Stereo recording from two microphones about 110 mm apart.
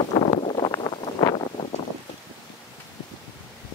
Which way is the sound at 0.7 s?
35° left (ahead or behind).